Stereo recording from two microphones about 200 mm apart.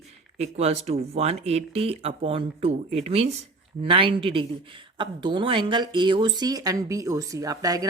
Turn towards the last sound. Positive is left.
turn(degrees=-20)  # may be behind; listen again after turning